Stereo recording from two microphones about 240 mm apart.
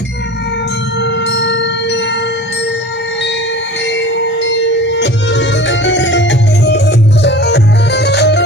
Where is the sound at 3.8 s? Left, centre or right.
Left.